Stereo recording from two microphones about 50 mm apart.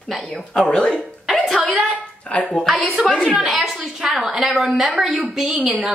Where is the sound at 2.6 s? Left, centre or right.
Centre.